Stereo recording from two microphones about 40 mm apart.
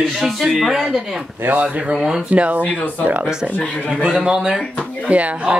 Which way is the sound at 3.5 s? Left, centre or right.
Left.